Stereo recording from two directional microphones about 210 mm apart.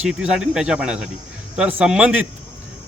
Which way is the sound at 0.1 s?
5° right (ahead or behind).